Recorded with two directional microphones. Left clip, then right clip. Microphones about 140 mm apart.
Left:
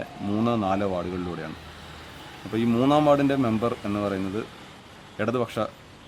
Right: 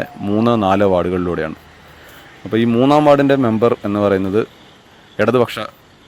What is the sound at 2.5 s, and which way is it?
A man's voice, 50° right (ahead or behind).